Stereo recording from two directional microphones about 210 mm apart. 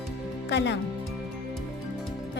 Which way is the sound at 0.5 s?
55° left (ahead or behind).